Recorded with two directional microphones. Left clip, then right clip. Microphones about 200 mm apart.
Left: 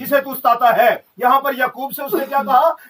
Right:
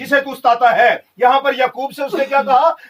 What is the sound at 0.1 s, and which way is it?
Speech, 30° right (ahead or behind).